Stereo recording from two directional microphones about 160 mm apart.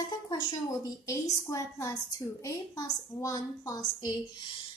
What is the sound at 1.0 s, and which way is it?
A woman's voice, 20° left (ahead or behind).